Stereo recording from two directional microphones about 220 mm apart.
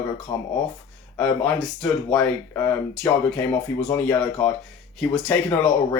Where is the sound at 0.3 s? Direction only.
15° left (ahead or behind).